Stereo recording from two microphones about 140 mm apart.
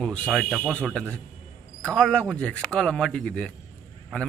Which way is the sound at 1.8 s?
5° left (ahead or behind).